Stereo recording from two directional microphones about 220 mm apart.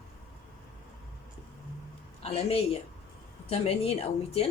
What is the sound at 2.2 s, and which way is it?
A woman's voice, 25° left (ahead or behind).